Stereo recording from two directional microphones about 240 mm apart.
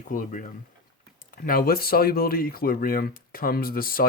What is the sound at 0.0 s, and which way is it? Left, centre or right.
Speech, left.